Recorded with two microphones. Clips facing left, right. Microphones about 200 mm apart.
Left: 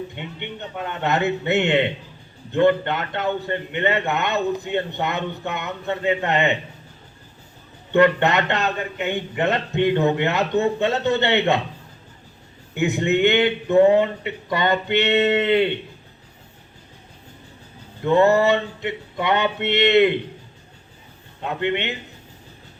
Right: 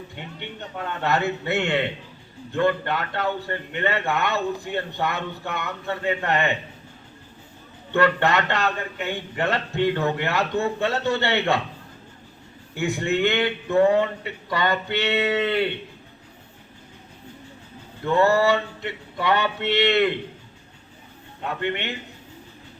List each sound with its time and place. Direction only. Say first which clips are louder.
0.2 s a man's voice: left 3 dB; 20° left (ahead or behind)
7.9 s a man's voice: left 4 dB; 20° left (ahead or behind)
12.7 s a man's voice: left 4 dB; 20° left (ahead or behind)
18.0 s a man's voice: left 3 dB; 20° left (ahead or behind)
21.4 s a man's voice: left 4 dB; 20° left (ahead or behind)